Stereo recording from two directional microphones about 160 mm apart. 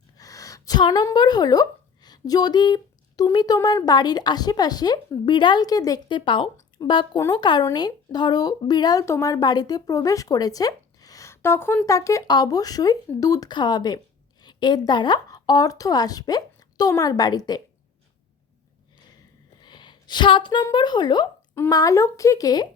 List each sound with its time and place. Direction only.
0.2 s a woman's voice: 20° left (ahead or behind)
7.2 s speech: 15° left (ahead or behind)
7.4 s speech: 25° left (ahead or behind)
19.5 s a woman's voice: 30° left (ahead or behind)